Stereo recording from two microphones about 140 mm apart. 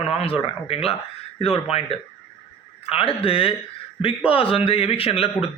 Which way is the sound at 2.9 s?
45° left (ahead or behind).